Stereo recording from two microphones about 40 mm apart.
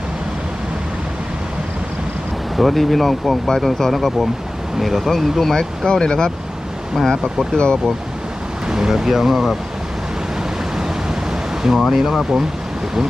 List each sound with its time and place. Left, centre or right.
2.6 s speech: centre
7.0 s speech: centre
7.5 s speech: left
8.6 s speech: centre
10.8 s pink noise: centre
11.8 s speech: centre